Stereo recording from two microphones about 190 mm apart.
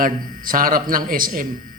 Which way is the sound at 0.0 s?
45° right (ahead or behind).